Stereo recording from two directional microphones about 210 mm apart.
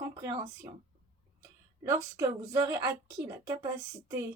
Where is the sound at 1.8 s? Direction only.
15° right (ahead or behind).